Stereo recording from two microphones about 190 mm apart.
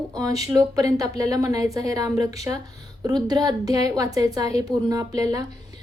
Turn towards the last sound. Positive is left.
turn(degrees=-20)  # may be behind; listen again after turning